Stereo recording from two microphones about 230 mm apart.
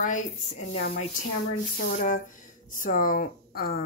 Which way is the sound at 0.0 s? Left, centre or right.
Left.